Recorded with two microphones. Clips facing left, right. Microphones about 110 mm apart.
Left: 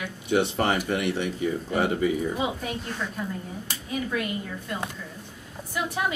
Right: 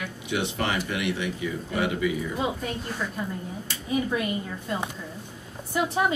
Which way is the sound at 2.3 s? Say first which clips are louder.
Even; 5° left (ahead or behind).